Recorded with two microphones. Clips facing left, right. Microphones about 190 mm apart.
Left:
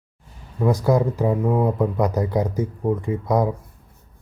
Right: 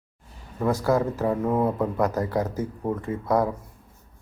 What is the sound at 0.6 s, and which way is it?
Speech, 15° left (ahead or behind).